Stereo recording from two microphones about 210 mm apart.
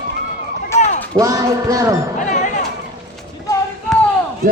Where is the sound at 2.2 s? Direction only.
35° left (ahead or behind).